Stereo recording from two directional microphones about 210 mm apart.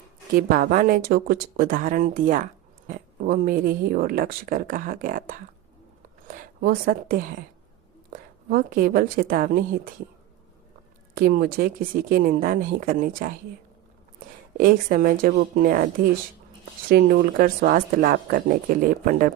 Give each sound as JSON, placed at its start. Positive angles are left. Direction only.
{"t": 0.3, "sound": "a woman's voice", "side_deg": -45}
{"t": 11.1, "sound": "speech", "side_deg": -45}
{"t": 14.6, "sound": "speech", "side_deg": -45}
{"t": 16.9, "sound": "speech", "side_deg": -45}